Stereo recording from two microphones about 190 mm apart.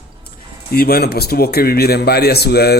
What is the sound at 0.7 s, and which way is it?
Speech, 55° left (ahead or behind).